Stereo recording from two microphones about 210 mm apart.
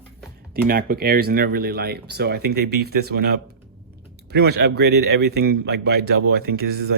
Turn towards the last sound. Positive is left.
turn(degrees=-50)  # may be behind; listen again after turning